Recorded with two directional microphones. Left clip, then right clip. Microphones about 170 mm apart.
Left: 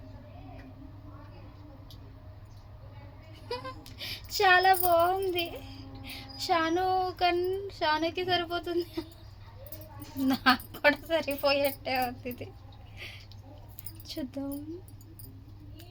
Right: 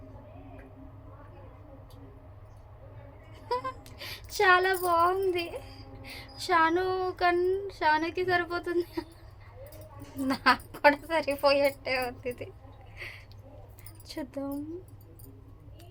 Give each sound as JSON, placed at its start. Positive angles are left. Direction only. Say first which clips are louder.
{"t": 3.5, "sound": "speech", "louder": "right 6 dB", "side_deg": -25}
{"t": 10.2, "sound": "a woman's voice", "louder": "even", "side_deg": -25}
{"t": 14.1, "sound": "a woman's voice", "louder": "even", "side_deg": -20}